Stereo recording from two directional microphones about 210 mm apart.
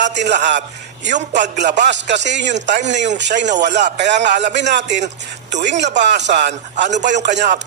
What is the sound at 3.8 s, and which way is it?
Speech, 35° right (ahead or behind).